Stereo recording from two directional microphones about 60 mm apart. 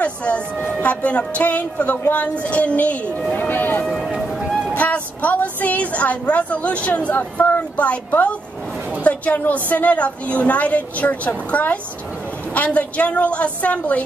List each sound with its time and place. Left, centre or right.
0.0 s a woman's voice: left
3.8 s a sound: centre
4.7 s a woman's voice: left